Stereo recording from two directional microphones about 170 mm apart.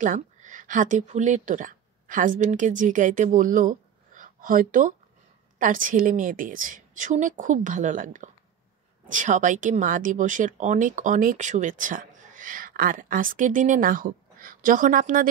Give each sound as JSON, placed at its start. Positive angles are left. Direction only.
{"t": 0.0, "sound": "speech", "side_deg": -50}
{"t": 3.3, "sound": "a sound", "side_deg": -50}
{"t": 5.6, "sound": "speech", "side_deg": -50}